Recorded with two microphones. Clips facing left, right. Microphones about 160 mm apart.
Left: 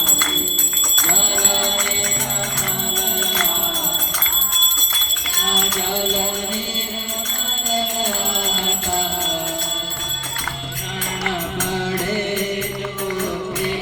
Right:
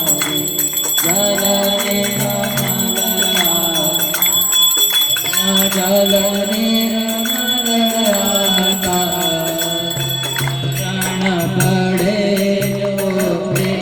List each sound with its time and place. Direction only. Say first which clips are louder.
5.8 s music: right 12 dB; 90° right
11.3 s music: right 9 dB; 75° right (ahead or behind)